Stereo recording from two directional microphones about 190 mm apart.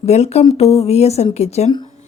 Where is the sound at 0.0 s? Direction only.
35° left (ahead or behind).